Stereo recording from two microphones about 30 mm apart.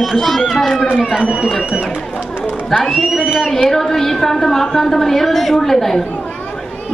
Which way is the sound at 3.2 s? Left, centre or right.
Right.